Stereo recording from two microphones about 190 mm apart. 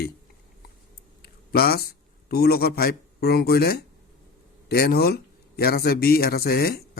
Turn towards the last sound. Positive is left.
turn(degrees=50)  # may be behind; listen again after turning